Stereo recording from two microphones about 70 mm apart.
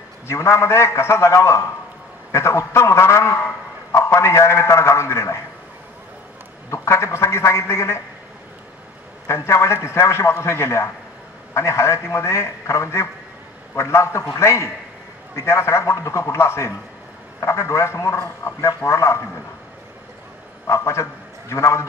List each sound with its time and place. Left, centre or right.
0.3 s a man's voice: left
6.7 s a man's voice: left
9.3 s a man's voice: left
20.6 s a man's voice: left